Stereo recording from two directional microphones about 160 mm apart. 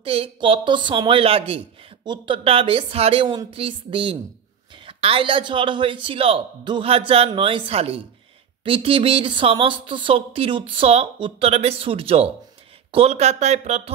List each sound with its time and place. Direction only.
0.0 s speech: 35° right (ahead or behind)